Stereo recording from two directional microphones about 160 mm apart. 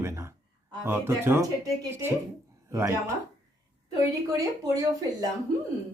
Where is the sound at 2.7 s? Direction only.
15° right (ahead or behind).